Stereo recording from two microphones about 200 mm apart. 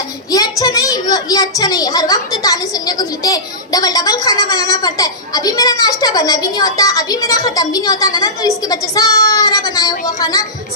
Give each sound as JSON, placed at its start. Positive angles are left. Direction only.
{"t": 0.3, "sound": "a child's voice", "side_deg": 15}